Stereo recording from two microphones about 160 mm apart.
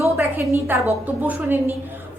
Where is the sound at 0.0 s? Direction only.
15° right (ahead or behind).